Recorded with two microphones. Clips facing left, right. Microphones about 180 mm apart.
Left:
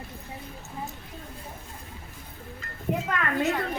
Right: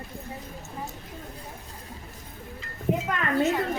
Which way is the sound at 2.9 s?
5° right (ahead or behind).